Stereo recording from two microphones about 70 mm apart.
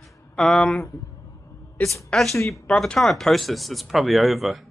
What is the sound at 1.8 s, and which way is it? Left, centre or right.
Speech, left.